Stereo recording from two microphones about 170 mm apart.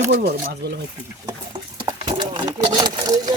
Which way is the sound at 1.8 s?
25° right (ahead or behind).